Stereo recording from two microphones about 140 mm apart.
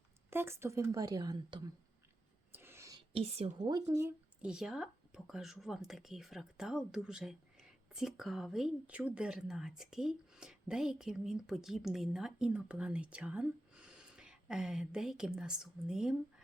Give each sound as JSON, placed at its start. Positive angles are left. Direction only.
{"t": 0.3, "sound": "a woman's voice", "side_deg": -15}
{"t": 2.5, "sound": "whispering", "side_deg": -15}
{"t": 3.1, "sound": "a woman's voice", "side_deg": -45}
{"t": 3.6, "sound": "a woman's voice", "side_deg": -30}
{"t": 4.4, "sound": "a woman's voice", "side_deg": -5}